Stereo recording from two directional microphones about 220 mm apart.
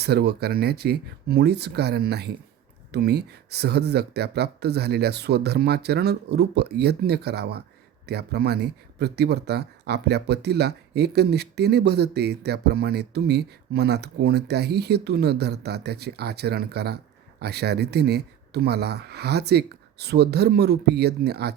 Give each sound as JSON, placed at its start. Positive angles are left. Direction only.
{"t": 0.0, "sound": "speech", "side_deg": -45}